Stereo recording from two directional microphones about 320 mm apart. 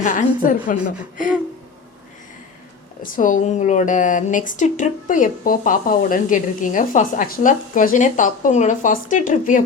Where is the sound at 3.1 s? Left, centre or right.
Left.